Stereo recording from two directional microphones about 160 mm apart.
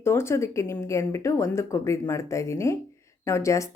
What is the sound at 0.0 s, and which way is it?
A woman's voice, 15° left (ahead or behind).